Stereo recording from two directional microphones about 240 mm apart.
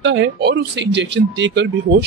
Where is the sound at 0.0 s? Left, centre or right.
Right.